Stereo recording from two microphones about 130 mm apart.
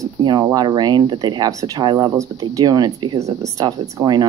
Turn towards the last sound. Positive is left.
turn(degrees=-35)  # may be behind; listen again after turning